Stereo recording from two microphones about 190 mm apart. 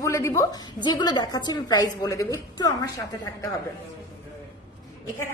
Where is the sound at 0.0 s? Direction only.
15° left (ahead or behind).